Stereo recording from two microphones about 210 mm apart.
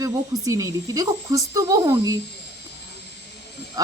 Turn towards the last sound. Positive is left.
turn(degrees=-15)  # may be behind; listen again after turning